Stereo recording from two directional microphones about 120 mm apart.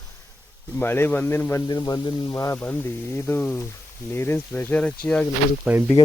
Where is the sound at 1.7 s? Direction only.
35° left (ahead or behind).